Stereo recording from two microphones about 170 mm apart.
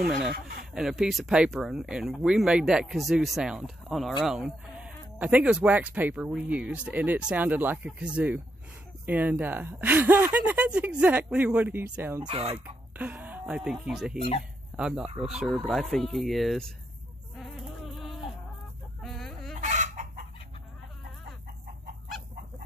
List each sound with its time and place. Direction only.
0.3 s speech: 70° right (ahead or behind)
0.7 s speech: 5° right (ahead or behind)
12.2 s speech: 30° right (ahead or behind)
12.5 s speech: 10° right (ahead or behind)
17.4 s insect: centre (ahead or behind)
19.0 s fowl: centre (ahead or behind)
19.5 s chicken: 45° right (ahead or behind)